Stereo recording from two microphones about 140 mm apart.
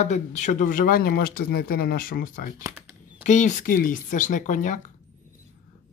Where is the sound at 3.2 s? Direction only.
60° left (ahead or behind).